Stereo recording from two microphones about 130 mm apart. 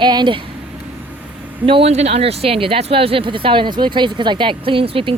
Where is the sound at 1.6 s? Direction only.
50° right (ahead or behind).